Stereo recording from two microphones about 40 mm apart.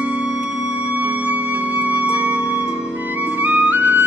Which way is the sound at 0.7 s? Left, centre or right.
Right.